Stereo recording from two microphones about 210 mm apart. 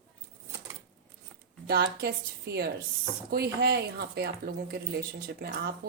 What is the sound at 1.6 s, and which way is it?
A woman's voice, 50° right (ahead or behind).